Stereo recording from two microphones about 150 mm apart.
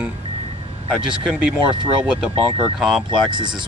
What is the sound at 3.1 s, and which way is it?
Speech, 30° right (ahead or behind).